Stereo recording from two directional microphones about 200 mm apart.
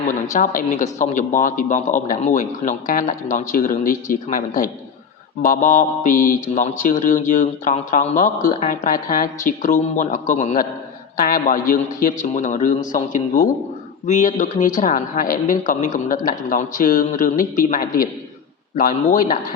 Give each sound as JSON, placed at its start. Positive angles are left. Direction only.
{"t": 0.1, "sound": "speech", "side_deg": 40}